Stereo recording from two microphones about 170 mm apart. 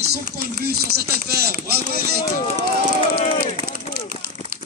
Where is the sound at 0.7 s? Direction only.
70° right (ahead or behind).